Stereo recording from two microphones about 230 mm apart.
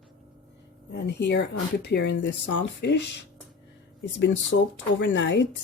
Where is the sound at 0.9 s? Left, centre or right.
Left.